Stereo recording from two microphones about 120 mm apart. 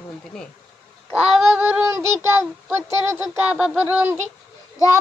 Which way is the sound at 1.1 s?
5° right (ahead or behind).